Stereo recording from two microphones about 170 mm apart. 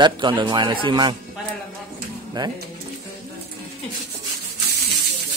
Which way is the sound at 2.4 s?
25° right (ahead or behind).